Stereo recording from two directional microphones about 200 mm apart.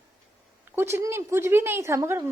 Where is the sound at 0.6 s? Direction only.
10° right (ahead or behind).